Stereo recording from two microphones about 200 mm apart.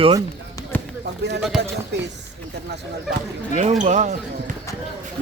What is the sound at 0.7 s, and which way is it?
Basketball bounce, 10° left (ahead or behind).